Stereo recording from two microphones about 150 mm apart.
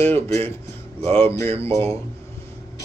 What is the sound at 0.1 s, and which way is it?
Speech, 15° left (ahead or behind).